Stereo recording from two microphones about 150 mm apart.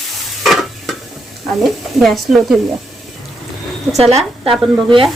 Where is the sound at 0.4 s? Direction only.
Centre (ahead or behind).